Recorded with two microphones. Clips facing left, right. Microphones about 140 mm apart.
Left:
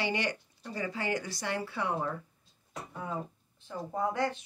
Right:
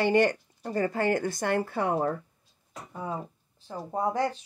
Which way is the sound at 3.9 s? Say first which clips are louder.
Right 4 dB; 35° right (ahead or behind).